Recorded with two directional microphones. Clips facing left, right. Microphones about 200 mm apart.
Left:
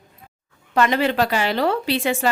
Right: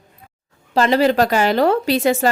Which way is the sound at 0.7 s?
35° right (ahead or behind).